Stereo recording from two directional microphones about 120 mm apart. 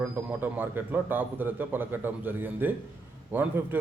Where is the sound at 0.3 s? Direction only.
15° right (ahead or behind).